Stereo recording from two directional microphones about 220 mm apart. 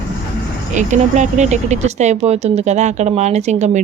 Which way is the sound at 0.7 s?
35° right (ahead or behind).